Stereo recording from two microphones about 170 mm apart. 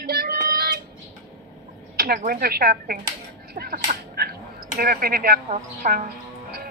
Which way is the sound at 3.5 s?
60° right (ahead or behind).